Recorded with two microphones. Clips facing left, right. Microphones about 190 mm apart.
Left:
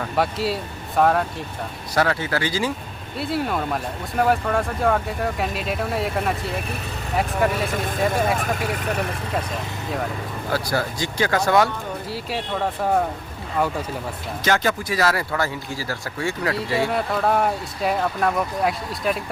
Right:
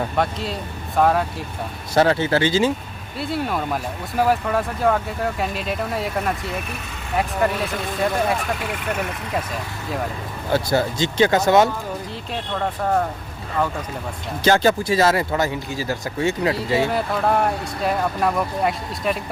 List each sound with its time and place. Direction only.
0.2 s speech: 5° left (ahead or behind)
2.0 s speech: 25° right (ahead or behind)
3.2 s speech: centre (ahead or behind)
10.5 s speech: 25° right (ahead or behind)
12.3 s speech: 5° left (ahead or behind)
14.4 s speech: 30° right (ahead or behind)
16.9 s speech: centre (ahead or behind)